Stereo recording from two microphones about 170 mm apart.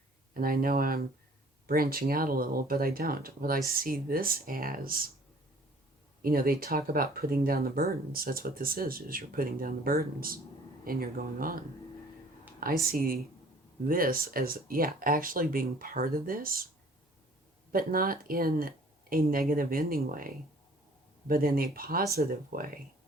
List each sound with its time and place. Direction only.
0.3 s speech: 60° right (ahead or behind)
6.2 s speech: 60° right (ahead or behind)
17.7 s speech: 55° right (ahead or behind)
21.2 s speech: 60° right (ahead or behind)